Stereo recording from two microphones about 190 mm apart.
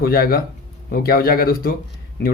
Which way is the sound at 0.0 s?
50° left (ahead or behind).